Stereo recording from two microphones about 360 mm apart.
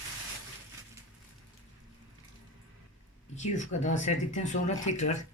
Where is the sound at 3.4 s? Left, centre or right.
Centre.